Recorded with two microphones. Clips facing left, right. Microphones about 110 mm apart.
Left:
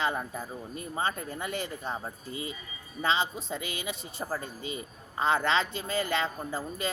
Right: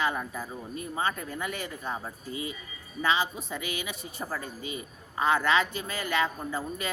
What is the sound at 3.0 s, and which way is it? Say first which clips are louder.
A woman's voice: right 1 dB; 30° left (ahead or behind).